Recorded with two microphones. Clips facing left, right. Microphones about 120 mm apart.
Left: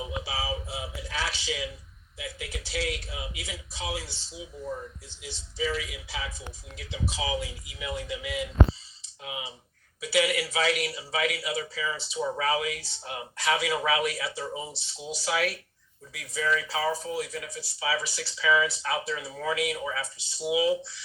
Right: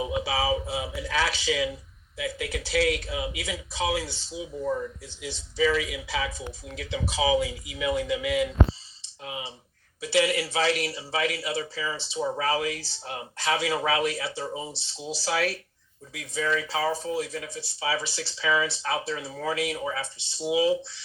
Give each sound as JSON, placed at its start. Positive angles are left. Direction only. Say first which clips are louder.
{"t": 0.0, "sound": "speech", "louder": "right 7 dB", "side_deg": -90}
{"t": 9.0, "sound": "clicking", "louder": "right 2 dB", "side_deg": -35}
{"t": 10.0, "sound": "speech", "louder": "right 2 dB", "side_deg": -30}